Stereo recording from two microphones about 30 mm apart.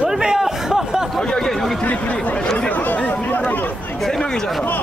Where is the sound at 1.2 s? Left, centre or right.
Left.